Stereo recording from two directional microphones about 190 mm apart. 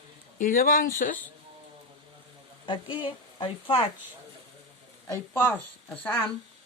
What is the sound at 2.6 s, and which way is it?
Speech, 25° left (ahead or behind).